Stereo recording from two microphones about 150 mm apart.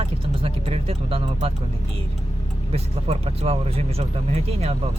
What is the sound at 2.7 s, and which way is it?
Speech, 40° right (ahead or behind).